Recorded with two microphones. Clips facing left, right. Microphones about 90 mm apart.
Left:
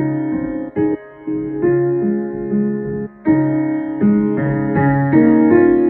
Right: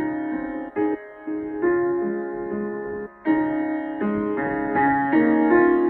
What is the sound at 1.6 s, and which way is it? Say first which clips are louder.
Music: left 5 dB; 25° right (ahead or behind).